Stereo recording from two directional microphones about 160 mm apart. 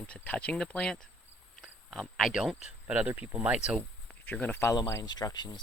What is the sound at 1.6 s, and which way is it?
Speech, centre (ahead or behind).